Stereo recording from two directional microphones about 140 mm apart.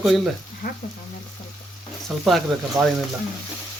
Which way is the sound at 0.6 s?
75° left (ahead or behind).